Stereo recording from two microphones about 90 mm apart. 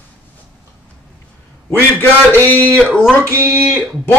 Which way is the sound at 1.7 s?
20° left (ahead or behind).